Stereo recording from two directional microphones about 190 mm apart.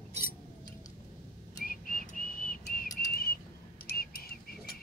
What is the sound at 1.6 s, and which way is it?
Whistling, 50° left (ahead or behind).